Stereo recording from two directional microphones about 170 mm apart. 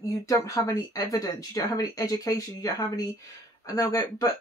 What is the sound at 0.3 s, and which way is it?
Speech, 20° left (ahead or behind).